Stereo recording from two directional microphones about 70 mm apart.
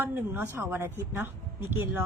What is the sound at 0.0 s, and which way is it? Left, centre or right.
A woman's voice, right.